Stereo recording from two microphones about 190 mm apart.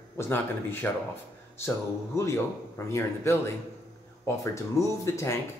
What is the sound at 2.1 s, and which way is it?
Speech, 15° left (ahead or behind).